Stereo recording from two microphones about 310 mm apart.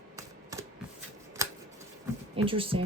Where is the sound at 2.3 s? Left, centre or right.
Centre.